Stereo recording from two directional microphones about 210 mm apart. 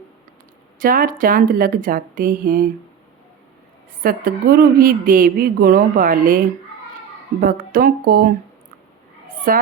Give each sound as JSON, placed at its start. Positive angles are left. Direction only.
{"t": 0.8, "sound": "speech", "side_deg": -40}
{"t": 4.0, "sound": "speech", "side_deg": -45}
{"t": 9.5, "sound": "a woman's voice", "side_deg": -40}